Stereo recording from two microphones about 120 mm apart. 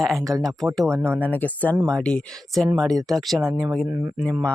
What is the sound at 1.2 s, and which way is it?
Speech, 15° left (ahead or behind).